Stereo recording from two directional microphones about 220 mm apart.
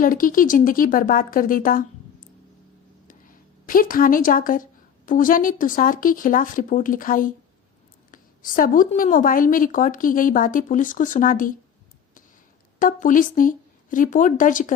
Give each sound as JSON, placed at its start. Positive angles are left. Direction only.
{"t": 0.0, "sound": "a woman's voice", "side_deg": 40}
{"t": 3.1, "sound": "a sound", "side_deg": 40}
{"t": 5.0, "sound": "a woman's voice", "side_deg": 40}
{"t": 12.8, "sound": "a woman's voice", "side_deg": 35}